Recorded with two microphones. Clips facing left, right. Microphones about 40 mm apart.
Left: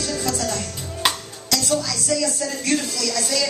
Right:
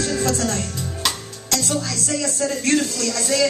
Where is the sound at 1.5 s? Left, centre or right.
Right.